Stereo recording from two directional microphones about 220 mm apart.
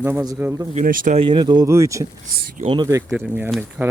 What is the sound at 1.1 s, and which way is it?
Speech, 20° right (ahead or behind).